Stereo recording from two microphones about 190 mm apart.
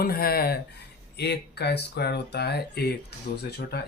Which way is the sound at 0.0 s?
50° left (ahead or behind).